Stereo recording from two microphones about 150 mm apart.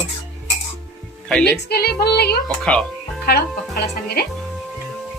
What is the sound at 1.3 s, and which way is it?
Speech, 5° left (ahead or behind).